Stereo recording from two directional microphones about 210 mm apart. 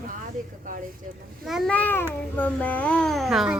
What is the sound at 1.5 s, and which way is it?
A child's voice, centre (ahead or behind).